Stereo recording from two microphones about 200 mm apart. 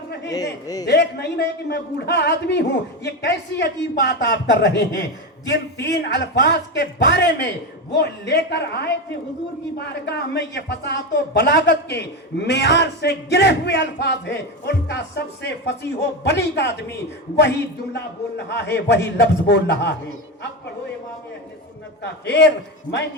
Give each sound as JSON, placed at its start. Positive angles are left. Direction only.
{"t": 0.3, "sound": "a man's voice", "side_deg": 20}
{"t": 0.9, "sound": "a man's voice", "side_deg": 55}
{"t": 17.9, "sound": "a man's voice", "side_deg": 60}
{"t": 22.0, "sound": "a man's voice", "side_deg": 60}